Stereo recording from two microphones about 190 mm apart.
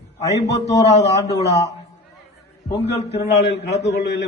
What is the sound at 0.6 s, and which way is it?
Speech, 35° left (ahead or behind).